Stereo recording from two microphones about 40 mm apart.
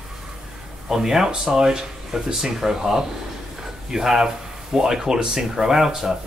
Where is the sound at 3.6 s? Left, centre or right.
Centre.